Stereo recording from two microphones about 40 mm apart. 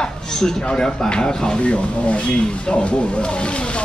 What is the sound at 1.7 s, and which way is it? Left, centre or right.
Speech, left.